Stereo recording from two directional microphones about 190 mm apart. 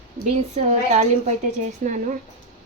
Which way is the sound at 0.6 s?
35° right (ahead or behind).